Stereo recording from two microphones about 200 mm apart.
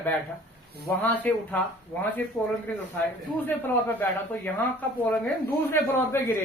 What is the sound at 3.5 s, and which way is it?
Speech, 10° left (ahead or behind).